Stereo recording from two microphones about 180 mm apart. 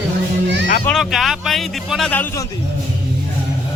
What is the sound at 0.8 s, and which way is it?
A man's voice, centre (ahead or behind).